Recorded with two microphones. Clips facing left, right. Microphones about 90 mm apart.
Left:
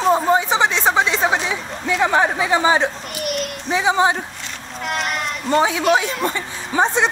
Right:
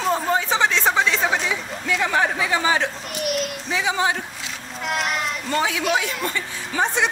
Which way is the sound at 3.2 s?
Centre (ahead or behind).